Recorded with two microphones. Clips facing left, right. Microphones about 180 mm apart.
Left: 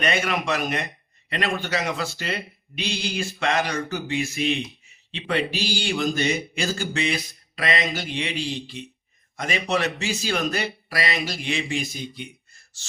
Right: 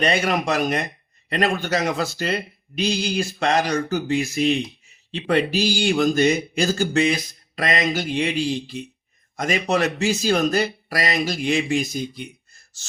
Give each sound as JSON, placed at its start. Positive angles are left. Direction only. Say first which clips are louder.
{"t": 0.0, "sound": "speech", "louder": "right 4 dB", "side_deg": -35}